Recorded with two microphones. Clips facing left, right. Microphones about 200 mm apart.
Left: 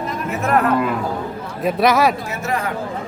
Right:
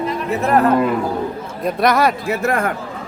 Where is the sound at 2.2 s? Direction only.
55° right (ahead or behind).